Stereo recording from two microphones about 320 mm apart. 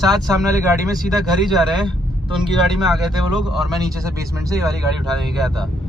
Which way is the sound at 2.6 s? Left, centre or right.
Centre.